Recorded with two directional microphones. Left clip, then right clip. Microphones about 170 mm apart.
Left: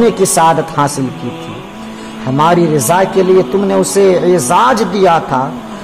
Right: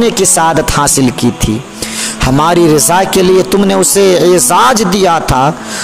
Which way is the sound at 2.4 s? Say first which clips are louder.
Right 2 dB; 60° right (ahead or behind).